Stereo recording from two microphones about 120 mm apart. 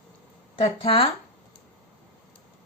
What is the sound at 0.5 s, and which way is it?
Speech, 50° left (ahead or behind).